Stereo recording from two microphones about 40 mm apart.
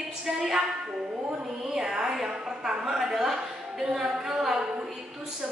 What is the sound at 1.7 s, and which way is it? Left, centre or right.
A woman's voice, centre.